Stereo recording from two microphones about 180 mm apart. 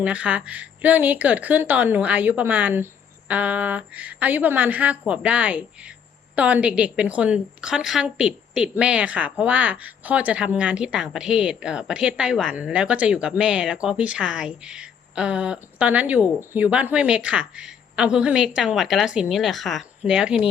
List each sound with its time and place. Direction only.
0.0 s a woman's voice: 5° right (ahead or behind)